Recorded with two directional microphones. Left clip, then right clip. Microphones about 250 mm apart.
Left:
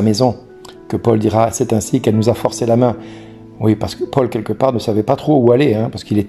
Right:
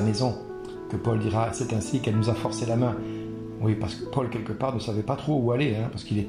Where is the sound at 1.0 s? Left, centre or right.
Left.